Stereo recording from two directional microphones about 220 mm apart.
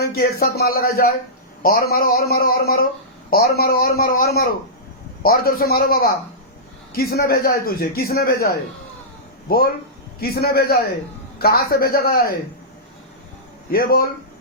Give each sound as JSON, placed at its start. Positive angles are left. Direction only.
{"t": 0.0, "sound": "a man's voice", "side_deg": 45}
{"t": 13.7, "sound": "speech", "side_deg": 40}